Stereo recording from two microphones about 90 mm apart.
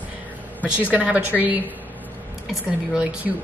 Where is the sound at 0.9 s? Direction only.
15° right (ahead or behind).